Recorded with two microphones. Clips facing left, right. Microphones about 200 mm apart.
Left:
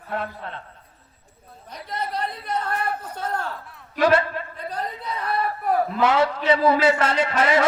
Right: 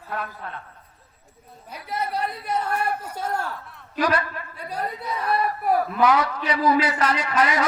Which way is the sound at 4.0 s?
25° left (ahead or behind).